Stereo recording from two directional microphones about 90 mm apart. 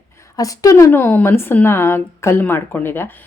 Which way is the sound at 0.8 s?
25° left (ahead or behind).